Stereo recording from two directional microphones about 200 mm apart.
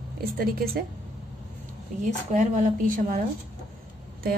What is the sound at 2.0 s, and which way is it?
A woman's voice, 40° right (ahead or behind).